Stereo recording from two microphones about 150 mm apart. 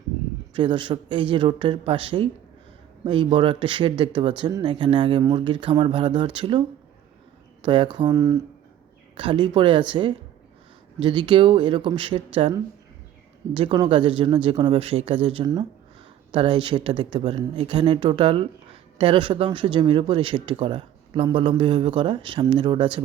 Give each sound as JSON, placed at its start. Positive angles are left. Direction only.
{"t": 0.5, "sound": "speech", "side_deg": -30}
{"t": 7.6, "sound": "speech", "side_deg": -35}
{"t": 9.1, "sound": "speech", "side_deg": -35}